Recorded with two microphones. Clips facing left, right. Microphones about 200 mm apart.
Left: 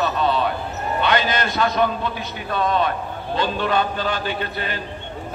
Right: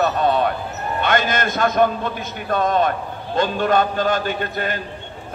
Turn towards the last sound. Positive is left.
turn(degrees=-45)  # may be behind; listen again after turning